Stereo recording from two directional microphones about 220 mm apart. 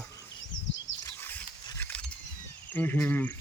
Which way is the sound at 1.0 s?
10° left (ahead or behind).